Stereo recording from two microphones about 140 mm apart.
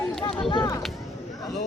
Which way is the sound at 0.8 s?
Centre (ahead or behind).